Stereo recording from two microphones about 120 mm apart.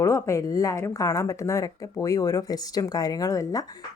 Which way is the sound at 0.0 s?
25° left (ahead or behind).